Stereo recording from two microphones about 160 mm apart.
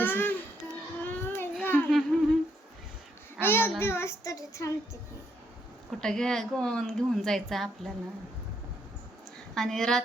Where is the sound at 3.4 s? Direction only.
15° left (ahead or behind).